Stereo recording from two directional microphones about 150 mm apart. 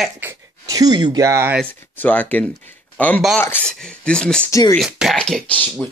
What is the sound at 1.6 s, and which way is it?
Speech, 10° left (ahead or behind).